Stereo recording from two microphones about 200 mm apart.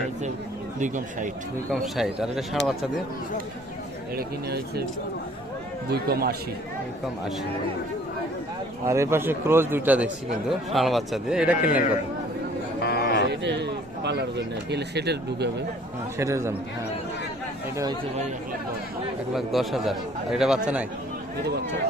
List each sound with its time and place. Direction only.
0.8 s speech: 40° right (ahead or behind)
1.7 s a man's voice: centre (ahead or behind)
4.1 s speech: 50° right (ahead or behind)
5.9 s speech: 50° right (ahead or behind)
8.9 s a man's voice: 15° right (ahead or behind)
12.8 s a sound: 55° left (ahead or behind)
13.2 s speech: 60° right (ahead or behind)
16.1 s a man's voice: 15° right (ahead or behind)
19.3 s a man's voice: centre (ahead or behind)